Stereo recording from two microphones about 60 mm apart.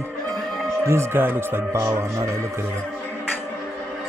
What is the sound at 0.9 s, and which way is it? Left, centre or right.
Speech, right.